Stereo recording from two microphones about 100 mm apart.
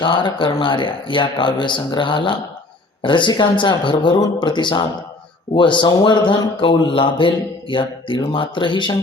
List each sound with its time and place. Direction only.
0.0 s speech: 55° left (ahead or behind)